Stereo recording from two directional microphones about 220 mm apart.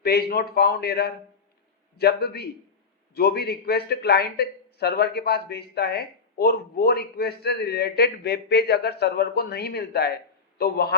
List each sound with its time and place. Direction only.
0.0 s speech: 45° left (ahead or behind)